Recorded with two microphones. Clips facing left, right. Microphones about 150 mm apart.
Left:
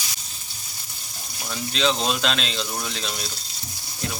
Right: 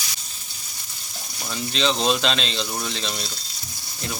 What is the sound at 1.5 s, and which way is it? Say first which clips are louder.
Speech: even; centre (ahead or behind).